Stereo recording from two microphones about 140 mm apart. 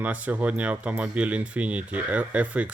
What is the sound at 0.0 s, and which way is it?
Speech, 10° right (ahead or behind).